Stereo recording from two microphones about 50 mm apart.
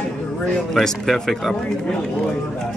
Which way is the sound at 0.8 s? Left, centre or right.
Centre.